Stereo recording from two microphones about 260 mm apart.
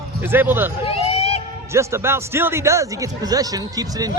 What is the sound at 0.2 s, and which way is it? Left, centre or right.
Speech, centre.